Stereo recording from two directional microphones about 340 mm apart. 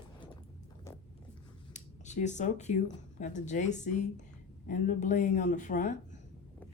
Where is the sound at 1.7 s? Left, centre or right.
Left.